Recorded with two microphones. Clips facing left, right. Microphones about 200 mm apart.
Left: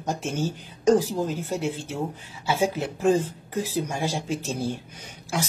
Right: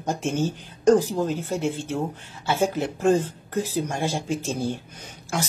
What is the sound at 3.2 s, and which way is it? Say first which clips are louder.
Speech: right 2 dB; 45° right (ahead or behind).